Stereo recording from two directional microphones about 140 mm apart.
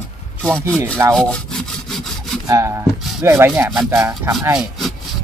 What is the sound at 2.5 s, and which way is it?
Speech, 20° right (ahead or behind).